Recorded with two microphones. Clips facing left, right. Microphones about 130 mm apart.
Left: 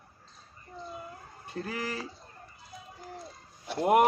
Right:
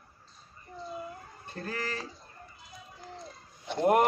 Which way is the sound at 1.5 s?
10° left (ahead or behind).